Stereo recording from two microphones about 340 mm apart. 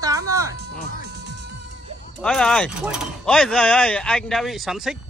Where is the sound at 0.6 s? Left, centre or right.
Right.